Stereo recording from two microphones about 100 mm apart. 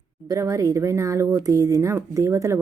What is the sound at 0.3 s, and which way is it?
Speech, 30° right (ahead or behind).